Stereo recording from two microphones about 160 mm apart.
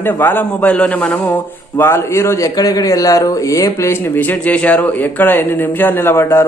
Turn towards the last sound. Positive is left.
turn(degrees=15)  # may be behind; listen again after turning